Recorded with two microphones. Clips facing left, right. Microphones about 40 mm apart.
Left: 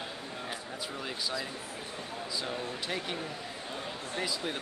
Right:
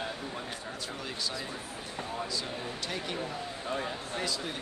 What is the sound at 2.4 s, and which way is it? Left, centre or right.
Speech, centre.